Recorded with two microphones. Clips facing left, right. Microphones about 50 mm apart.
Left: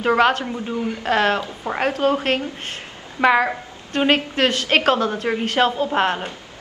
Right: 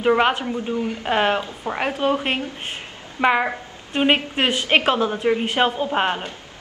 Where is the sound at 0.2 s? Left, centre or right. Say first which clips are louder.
Left 2 dB; centre.